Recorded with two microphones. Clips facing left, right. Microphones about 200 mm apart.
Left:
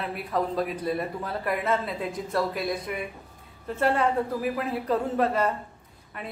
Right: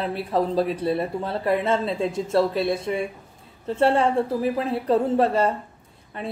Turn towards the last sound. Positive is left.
turn(degrees=-30)  # may be behind; listen again after turning